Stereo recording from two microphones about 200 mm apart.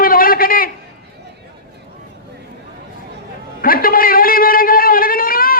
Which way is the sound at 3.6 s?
45° left (ahead or behind).